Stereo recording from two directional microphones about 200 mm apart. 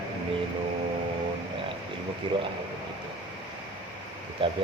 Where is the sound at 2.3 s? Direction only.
25° right (ahead or behind).